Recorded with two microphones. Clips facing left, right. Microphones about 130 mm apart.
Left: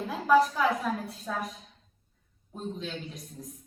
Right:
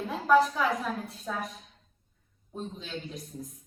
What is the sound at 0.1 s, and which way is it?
A woman's voice, centre (ahead or behind).